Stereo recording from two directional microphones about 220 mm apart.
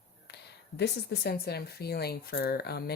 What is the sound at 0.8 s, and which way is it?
Speech, 50° left (ahead or behind).